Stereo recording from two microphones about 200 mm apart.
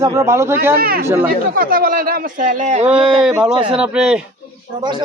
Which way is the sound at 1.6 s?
45° right (ahead or behind).